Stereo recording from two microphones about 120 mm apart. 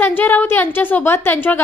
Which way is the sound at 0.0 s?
15° left (ahead or behind).